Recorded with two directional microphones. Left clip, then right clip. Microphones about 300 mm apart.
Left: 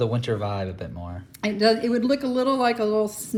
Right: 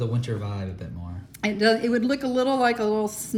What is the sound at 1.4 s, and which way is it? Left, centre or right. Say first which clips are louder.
Speech: left 1 dB; centre.